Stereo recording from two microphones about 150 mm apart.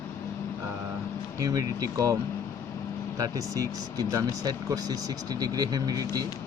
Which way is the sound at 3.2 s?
25° right (ahead or behind).